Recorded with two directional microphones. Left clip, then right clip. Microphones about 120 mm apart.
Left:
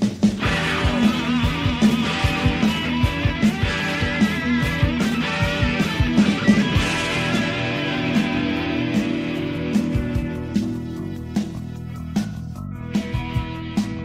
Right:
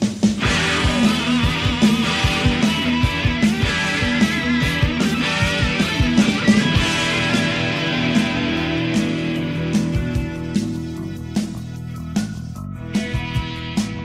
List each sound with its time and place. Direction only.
0.0 s music: 40° left (ahead or behind)